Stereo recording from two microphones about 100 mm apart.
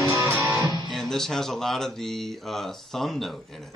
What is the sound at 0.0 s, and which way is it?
Music, 25° right (ahead or behind).